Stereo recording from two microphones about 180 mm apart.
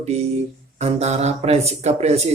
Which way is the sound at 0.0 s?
35° right (ahead or behind).